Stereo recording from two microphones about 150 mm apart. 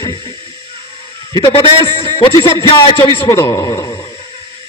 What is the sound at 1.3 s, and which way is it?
A man's voice, 40° left (ahead or behind).